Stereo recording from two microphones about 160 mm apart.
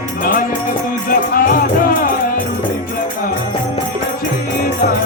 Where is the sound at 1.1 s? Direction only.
65° left (ahead or behind).